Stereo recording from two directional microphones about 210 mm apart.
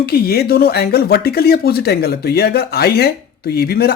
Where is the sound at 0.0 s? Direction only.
50° left (ahead or behind).